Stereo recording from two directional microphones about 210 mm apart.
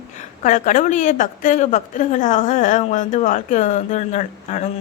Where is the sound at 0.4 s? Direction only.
35° left (ahead or behind).